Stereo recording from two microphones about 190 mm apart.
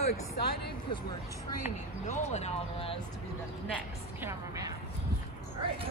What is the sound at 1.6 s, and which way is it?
Speech, 40° left (ahead or behind).